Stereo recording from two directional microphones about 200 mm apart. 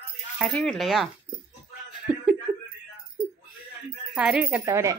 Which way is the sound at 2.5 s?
5° right (ahead or behind).